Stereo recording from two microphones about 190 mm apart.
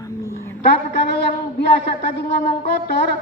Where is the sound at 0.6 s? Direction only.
60° left (ahead or behind).